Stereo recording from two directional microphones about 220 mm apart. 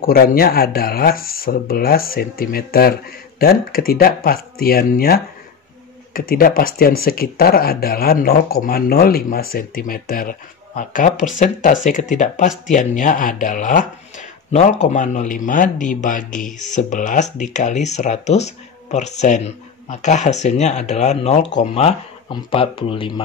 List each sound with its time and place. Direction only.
0.0 s speech: 40° left (ahead or behind); by 23.2 s 25° left (ahead or behind)